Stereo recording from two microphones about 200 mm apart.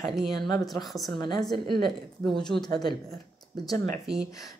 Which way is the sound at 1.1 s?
20° left (ahead or behind).